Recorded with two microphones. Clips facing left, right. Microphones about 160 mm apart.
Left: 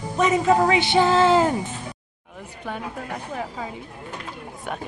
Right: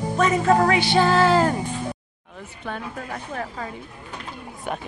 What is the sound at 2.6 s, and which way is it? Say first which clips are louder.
Speech: even; 10° left (ahead or behind).